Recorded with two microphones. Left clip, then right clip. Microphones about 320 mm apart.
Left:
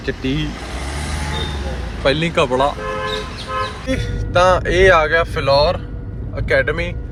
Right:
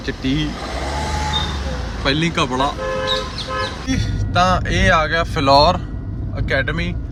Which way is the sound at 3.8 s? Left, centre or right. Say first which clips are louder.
Left 2 dB; centre.